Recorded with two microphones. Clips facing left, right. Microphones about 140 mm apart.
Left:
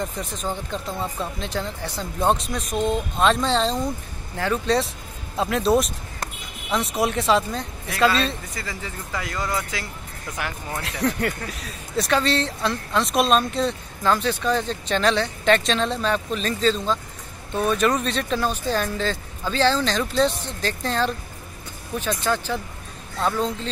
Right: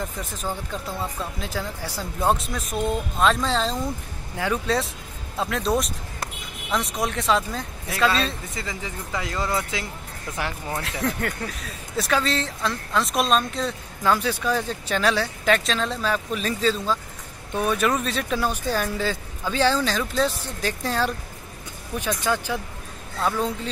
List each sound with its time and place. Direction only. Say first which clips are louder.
0.2 s speech: left 2 dB; 5° right (ahead or behind)
4.4 s speech: left 2 dB; 10° right (ahead or behind)
5.4 s speech: left 4 dB; centre (ahead or behind)
8.5 s speech: right 1 dB; 20° right (ahead or behind)
10.8 s speech: left 4 dB; centre (ahead or behind)
14.0 s speech: left 1 dB; 10° right (ahead or behind)